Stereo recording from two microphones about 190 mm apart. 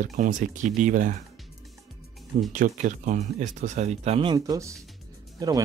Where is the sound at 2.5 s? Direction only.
40° right (ahead or behind).